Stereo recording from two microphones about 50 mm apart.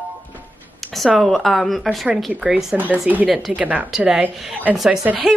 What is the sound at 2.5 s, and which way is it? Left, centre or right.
Speech, right.